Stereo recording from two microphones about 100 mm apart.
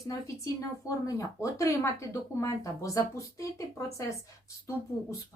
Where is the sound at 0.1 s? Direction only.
35° left (ahead or behind).